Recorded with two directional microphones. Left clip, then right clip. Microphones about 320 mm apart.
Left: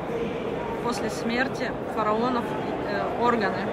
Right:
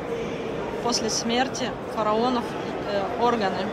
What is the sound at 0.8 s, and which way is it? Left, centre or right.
Speech, centre.